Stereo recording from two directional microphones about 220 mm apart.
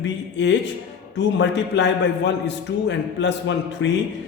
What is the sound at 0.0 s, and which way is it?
A man's voice, 55° left (ahead or behind).